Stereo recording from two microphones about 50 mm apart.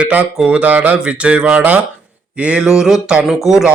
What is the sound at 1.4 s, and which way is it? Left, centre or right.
Speech, right.